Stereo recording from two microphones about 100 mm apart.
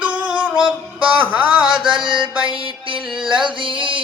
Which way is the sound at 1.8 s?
55° right (ahead or behind).